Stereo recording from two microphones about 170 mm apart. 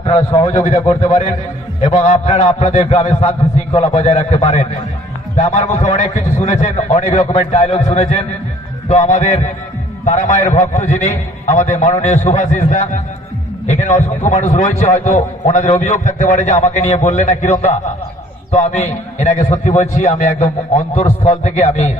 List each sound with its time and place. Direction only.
0.0 s a man's voice: 35° left (ahead or behind)